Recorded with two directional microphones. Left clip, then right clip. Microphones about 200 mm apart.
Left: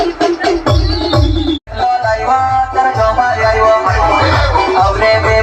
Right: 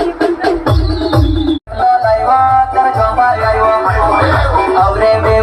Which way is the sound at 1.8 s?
Centre (ahead or behind).